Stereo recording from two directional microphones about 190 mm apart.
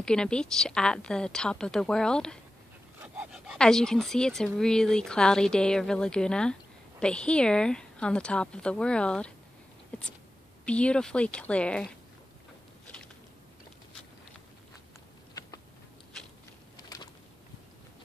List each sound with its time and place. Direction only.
0.0 s speech: 5° left (ahead or behind)
10.6 s speech: 5° left (ahead or behind)
16.9 s a sound: 20° left (ahead or behind)